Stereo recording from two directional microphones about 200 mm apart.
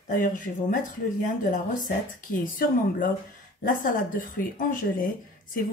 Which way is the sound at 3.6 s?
45° left (ahead or behind).